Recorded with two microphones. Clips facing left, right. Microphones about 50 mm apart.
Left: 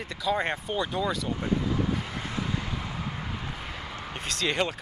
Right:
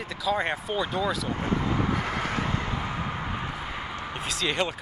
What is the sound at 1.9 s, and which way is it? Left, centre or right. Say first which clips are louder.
Vehicle: right 5 dB; right.